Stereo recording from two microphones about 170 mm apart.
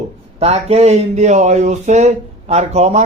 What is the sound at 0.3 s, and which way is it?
A man's voice, 35° right (ahead or behind).